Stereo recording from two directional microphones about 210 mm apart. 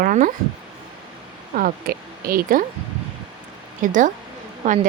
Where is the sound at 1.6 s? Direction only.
45° right (ahead or behind).